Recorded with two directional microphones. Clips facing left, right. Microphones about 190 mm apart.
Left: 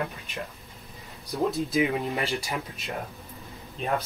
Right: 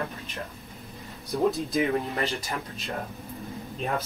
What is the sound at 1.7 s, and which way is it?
Speech, 10° left (ahead or behind).